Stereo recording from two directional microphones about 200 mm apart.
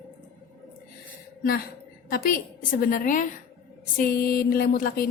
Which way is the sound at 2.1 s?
45° left (ahead or behind).